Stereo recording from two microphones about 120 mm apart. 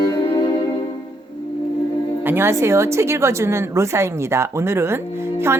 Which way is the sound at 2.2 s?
20° right (ahead or behind).